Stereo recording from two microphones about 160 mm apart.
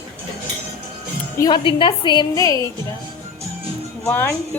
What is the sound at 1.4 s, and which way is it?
A woman's voice, 25° left (ahead or behind).